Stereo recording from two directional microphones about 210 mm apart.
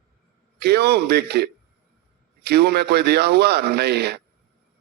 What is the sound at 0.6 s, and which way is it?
A man's voice, 50° right (ahead or behind).